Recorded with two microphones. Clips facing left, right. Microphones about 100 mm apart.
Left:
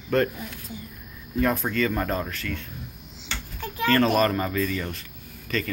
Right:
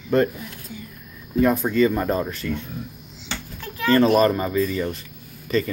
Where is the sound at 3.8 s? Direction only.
15° right (ahead or behind).